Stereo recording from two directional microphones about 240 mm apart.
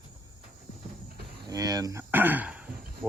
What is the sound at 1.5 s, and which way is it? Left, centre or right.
Speech, centre.